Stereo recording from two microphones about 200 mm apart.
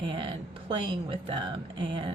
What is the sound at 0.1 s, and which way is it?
Speech, 25° right (ahead or behind).